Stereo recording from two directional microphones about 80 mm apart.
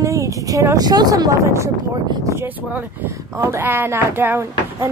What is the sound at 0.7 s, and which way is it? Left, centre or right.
Speech, right.